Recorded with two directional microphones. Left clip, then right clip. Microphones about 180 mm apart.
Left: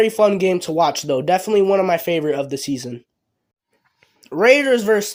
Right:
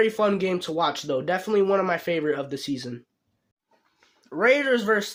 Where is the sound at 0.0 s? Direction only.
30° left (ahead or behind).